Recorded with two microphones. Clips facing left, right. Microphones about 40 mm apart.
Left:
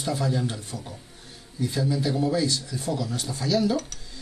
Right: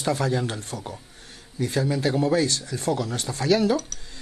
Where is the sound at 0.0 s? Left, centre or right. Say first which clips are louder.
Right 2 dB; right.